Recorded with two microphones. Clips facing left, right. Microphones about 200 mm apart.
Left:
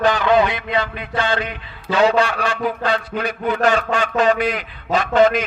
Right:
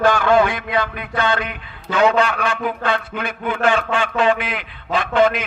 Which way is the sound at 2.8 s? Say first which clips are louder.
Left 1 dB; 35° left (ahead or behind).